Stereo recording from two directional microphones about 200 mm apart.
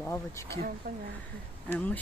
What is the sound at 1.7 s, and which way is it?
Speech, 10° left (ahead or behind).